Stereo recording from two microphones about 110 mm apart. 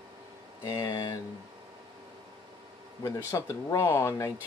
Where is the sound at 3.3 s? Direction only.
30° left (ahead or behind).